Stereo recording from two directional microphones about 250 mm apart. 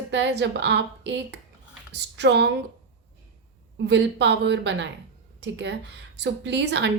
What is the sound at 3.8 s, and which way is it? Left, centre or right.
A woman's voice, right.